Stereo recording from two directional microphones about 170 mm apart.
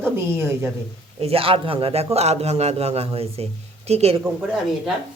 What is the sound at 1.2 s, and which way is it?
A man's voice, 35° right (ahead or behind).